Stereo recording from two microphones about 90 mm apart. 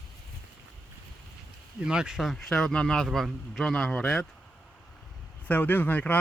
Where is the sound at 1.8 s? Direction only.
10° right (ahead or behind); by 4.0 s 5° left (ahead or behind).